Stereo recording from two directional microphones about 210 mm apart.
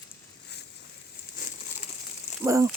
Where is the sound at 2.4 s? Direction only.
15° right (ahead or behind).